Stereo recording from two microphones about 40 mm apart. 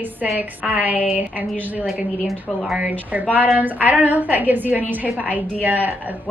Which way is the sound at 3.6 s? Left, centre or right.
Right.